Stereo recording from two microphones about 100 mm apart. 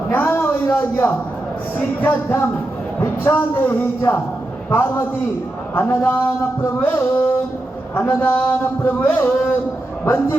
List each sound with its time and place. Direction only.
0.1 s a man's voice: 20° left (ahead or behind)